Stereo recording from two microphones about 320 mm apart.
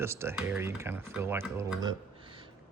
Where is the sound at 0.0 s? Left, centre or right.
Centre.